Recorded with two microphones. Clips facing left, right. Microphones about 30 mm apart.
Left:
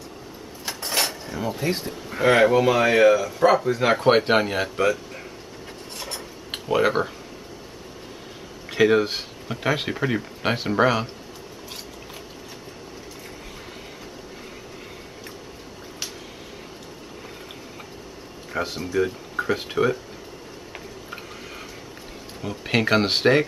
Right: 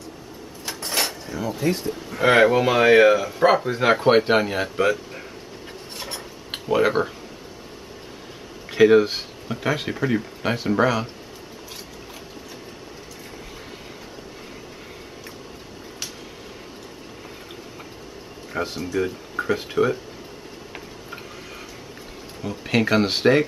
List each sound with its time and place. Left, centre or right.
0.7 s cutlery: centre
2.2 s speech: centre
4.0 s speech: centre
5.9 s filing: centre
6.7 s speech: centre
8.7 s speech: centre
18.5 s speech: centre
22.4 s speech: centre